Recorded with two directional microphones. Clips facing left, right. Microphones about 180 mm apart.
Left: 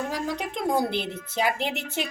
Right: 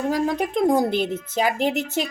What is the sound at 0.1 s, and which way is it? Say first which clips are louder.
A woman's voice: right 8 dB; 50° right (ahead or behind).